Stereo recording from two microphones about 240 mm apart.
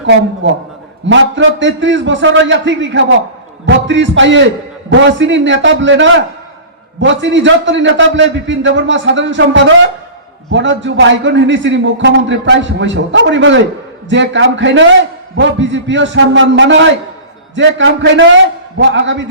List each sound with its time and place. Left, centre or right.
1.0 s a man's voice: right